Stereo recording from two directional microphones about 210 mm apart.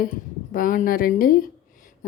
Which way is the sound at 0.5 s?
40° left (ahead or behind).